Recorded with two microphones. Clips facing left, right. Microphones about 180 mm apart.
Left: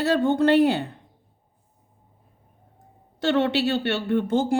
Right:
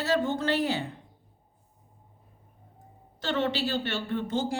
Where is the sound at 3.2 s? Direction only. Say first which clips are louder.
Left 7 dB; 65° left (ahead or behind).